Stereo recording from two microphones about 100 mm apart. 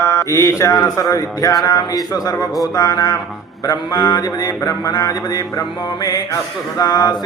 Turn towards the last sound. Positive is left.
turn(degrees=40)  # may be behind; listen again after turning